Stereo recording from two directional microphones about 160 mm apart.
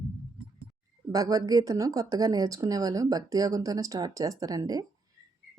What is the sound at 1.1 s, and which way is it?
A woman's voice, 20° right (ahead or behind).